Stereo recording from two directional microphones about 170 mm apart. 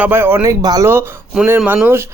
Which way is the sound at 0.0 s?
10° right (ahead or behind).